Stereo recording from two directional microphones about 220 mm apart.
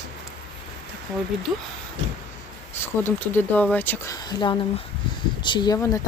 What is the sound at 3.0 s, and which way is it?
A woman's voice, 10° left (ahead or behind).